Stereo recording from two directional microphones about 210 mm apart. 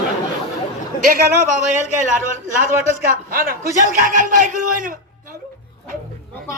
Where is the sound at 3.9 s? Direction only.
40° right (ahead or behind).